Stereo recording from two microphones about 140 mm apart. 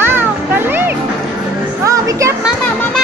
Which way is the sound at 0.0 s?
15° right (ahead or behind).